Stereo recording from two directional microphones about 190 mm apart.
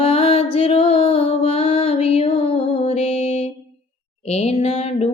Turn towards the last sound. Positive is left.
turn(degrees=35)  # may be behind; listen again after turning